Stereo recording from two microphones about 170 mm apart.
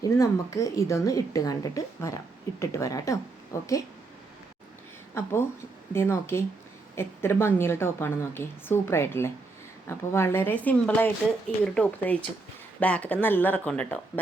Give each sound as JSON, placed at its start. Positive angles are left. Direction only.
{"t": 0.0, "sound": "a woman's voice", "side_deg": 20}
{"t": 5.1, "sound": "a woman's voice", "side_deg": 15}